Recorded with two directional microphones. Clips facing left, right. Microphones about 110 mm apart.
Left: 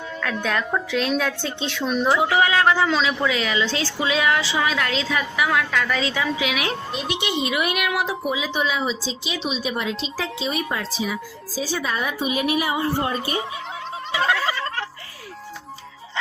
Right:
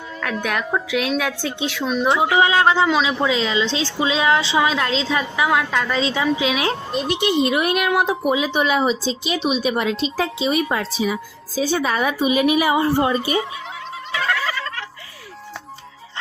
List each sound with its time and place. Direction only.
0.2 s a woman's voice: 10° right (ahead or behind); by 8.1 s 40° right (ahead or behind)
8.3 s a woman's voice: 55° right (ahead or behind); by 13.1 s 90° right